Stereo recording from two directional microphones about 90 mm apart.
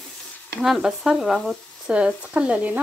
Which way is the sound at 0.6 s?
5° right (ahead or behind).